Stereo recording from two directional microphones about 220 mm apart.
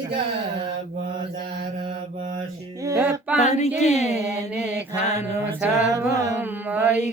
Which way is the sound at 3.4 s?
30° left (ahead or behind).